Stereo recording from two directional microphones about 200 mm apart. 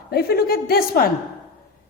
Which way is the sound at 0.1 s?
50° left (ahead or behind).